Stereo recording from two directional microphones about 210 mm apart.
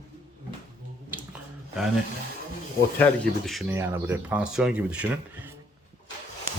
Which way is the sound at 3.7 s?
10° right (ahead or behind).